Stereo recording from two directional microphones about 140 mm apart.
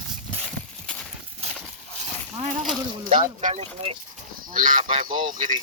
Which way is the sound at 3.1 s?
75° right (ahead or behind).